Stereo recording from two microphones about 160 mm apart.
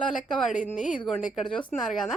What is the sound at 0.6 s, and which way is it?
Speech, 50° left (ahead or behind).